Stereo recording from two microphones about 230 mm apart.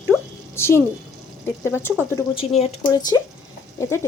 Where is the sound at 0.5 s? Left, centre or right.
Centre.